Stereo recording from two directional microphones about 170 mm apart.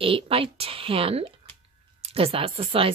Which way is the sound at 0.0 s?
35° right (ahead or behind).